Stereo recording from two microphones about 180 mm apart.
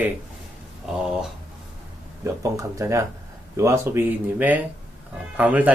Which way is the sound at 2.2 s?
15° right (ahead or behind).